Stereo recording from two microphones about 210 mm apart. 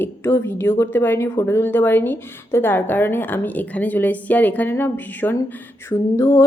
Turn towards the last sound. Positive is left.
turn(degrees=15)  # may be behind; listen again after turning